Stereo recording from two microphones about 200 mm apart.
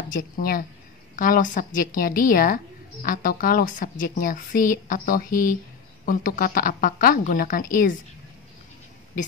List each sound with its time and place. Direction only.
0.1 s a woman's voice: 45° left (ahead or behind)